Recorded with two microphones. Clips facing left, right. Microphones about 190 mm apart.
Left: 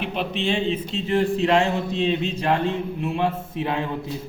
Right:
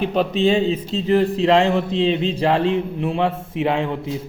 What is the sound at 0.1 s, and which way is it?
A man's voice, 40° right (ahead or behind).